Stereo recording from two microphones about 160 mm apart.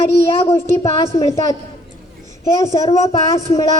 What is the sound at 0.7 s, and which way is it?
Speech, 20° left (ahead or behind).